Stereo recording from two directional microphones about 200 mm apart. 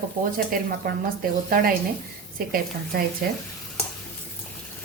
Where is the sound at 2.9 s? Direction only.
45° right (ahead or behind).